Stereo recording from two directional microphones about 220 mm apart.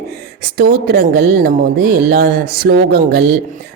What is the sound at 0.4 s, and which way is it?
Speech, 45° right (ahead or behind).